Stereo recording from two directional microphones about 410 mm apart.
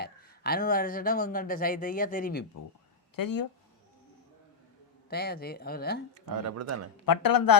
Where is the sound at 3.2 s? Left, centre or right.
Left.